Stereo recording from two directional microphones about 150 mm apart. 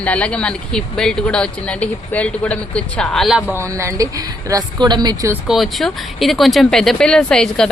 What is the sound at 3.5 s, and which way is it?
Speech, 20° right (ahead or behind).